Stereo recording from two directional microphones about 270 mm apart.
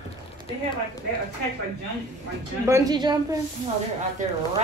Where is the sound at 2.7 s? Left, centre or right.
Centre.